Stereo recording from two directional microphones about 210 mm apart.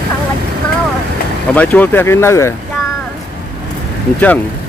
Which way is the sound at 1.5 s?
5° left (ahead or behind).